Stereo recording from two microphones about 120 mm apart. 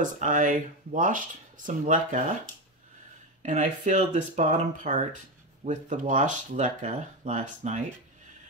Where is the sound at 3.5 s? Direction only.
90° right.